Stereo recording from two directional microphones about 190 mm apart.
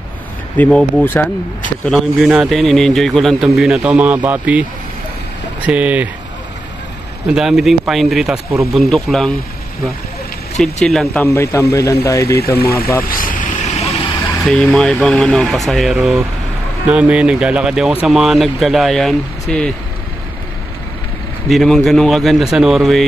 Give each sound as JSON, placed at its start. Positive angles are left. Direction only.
{"t": 0.6, "sound": "a man's voice", "side_deg": 5}
{"t": 5.7, "sound": "speech", "side_deg": -5}
{"t": 7.2, "sound": "a man's voice", "side_deg": -5}
{"t": 10.6, "sound": "a man's voice", "side_deg": 0}
{"t": 11.2, "sound": "speech", "side_deg": 15}
{"t": 13.0, "sound": "vehicle", "side_deg": 50}
{"t": 14.4, "sound": "a man's voice", "side_deg": 5}
{"t": 21.5, "sound": "a man's voice", "side_deg": 0}